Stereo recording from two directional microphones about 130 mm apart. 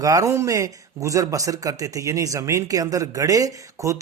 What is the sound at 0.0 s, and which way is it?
Speech, 25° right (ahead or behind).